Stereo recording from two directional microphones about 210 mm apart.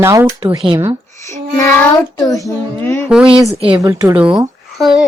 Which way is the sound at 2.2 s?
15° left (ahead or behind).